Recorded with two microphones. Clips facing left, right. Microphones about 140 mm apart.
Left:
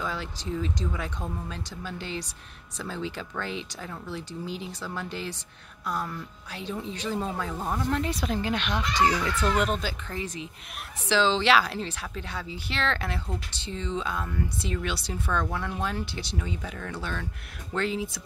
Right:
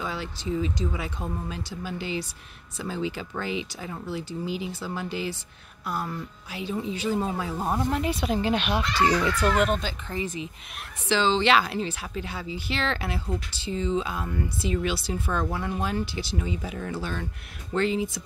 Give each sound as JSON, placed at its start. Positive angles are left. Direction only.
{"t": 0.0, "sound": "a woman's voice", "side_deg": 0}
{"t": 7.6, "sound": "speech", "side_deg": -20}
{"t": 7.9, "sound": "speech", "side_deg": -10}
{"t": 8.2, "sound": "speech", "side_deg": -20}
{"t": 9.5, "sound": "a woman's voice", "side_deg": 0}